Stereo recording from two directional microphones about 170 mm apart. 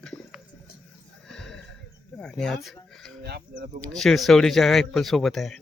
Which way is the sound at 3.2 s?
70° right (ahead or behind).